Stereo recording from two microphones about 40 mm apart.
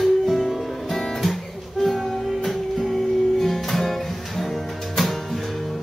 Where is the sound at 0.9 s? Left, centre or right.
Centre.